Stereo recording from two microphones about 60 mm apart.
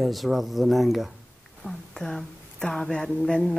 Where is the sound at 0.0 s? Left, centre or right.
Centre.